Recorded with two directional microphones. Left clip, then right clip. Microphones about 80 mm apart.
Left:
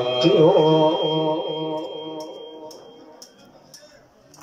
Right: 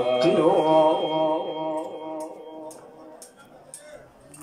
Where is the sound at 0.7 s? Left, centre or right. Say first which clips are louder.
Left 1 dB; centre.